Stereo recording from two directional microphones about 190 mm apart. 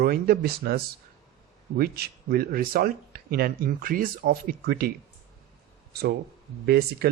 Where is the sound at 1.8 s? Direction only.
55° right (ahead or behind).